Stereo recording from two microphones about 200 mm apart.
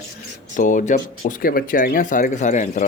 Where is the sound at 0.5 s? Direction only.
40° left (ahead or behind).